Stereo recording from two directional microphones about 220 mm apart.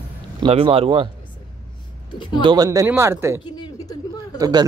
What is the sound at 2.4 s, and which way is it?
Speech, 20° right (ahead or behind).